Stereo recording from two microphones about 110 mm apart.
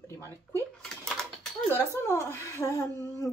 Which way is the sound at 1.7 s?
20° left (ahead or behind).